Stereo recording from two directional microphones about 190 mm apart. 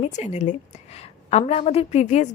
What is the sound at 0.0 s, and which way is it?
A woman's voice, 35° left (ahead or behind).